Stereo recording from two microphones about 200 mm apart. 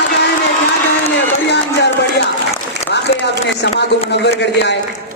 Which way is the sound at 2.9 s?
60° left (ahead or behind).